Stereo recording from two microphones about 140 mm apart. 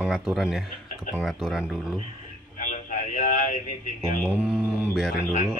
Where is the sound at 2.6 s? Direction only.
65° left (ahead or behind).